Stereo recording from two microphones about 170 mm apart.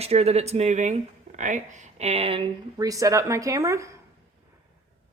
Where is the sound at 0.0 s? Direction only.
40° right (ahead or behind).